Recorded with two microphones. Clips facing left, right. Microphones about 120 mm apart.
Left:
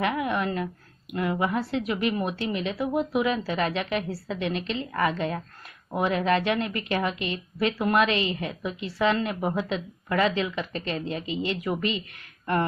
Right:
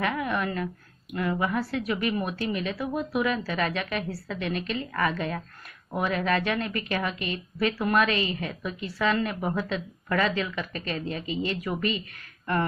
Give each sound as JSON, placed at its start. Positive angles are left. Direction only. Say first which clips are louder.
{"t": 0.0, "sound": "a woman's voice", "louder": "left 2 dB", "side_deg": 20}